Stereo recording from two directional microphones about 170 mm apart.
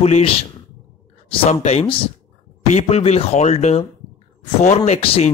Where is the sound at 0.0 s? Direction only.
40° left (ahead or behind).